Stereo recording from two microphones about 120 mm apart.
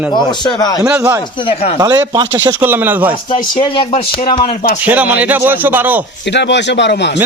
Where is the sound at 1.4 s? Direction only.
60° left (ahead or behind).